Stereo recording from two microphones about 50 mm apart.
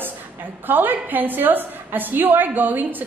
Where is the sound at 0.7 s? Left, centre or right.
Right.